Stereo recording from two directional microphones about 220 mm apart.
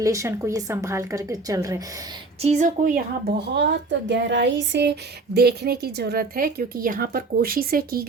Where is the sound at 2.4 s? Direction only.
30° right (ahead or behind).